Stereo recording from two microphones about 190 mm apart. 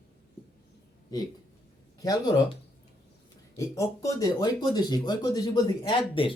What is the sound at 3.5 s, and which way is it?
Speech, 15° left (ahead or behind).